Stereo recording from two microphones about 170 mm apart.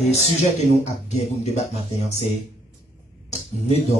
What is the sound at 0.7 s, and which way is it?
Speech, 40° left (ahead or behind).